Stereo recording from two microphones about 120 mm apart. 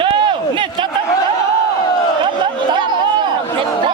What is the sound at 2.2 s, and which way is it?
Chatter, 40° right (ahead or behind).